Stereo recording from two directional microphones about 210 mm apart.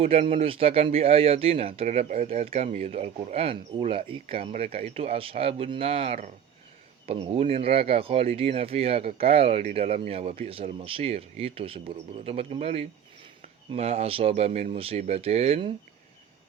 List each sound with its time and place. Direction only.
0.0 s speech: 30° right (ahead or behind)